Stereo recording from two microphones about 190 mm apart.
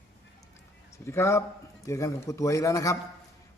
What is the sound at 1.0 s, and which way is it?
A man's voice, 15° left (ahead or behind).